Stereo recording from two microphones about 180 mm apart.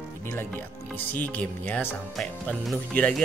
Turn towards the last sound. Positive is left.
turn(degrees=5)  # may be behind; listen again after turning